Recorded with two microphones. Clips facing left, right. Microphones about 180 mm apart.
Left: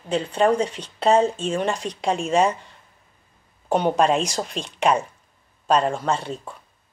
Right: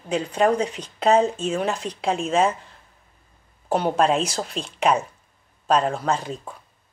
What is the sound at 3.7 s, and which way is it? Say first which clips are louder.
Speech: left 1 dB; 5° right (ahead or behind).